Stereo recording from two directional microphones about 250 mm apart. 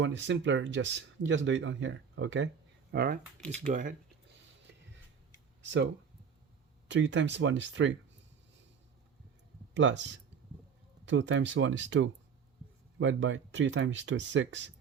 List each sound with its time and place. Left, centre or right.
0.0 s speech: right
2.9 s speech: right
3.4 s speech: centre
3.7 s speech: right
6.8 s speech: right
9.7 s speech: right